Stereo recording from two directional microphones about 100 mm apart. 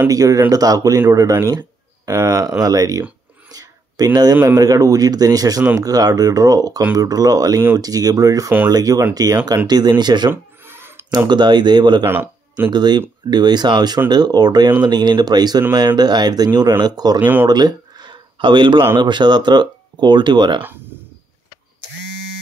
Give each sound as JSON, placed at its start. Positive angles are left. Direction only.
{"t": 0.1, "sound": "speech", "side_deg": -35}
{"t": 3.5, "sound": "a sound", "side_deg": -40}
{"t": 4.6, "sound": "speech", "side_deg": -35}
{"t": 10.3, "sound": "a sound", "side_deg": -20}
{"t": 11.2, "sound": "speech", "side_deg": -45}
{"t": 12.0, "sound": "a man's voice", "side_deg": -20}
{"t": 12.7, "sound": "speech", "side_deg": -45}
{"t": 17.5, "sound": "a sound", "side_deg": -45}
{"t": 18.9, "sound": "speech", "side_deg": -50}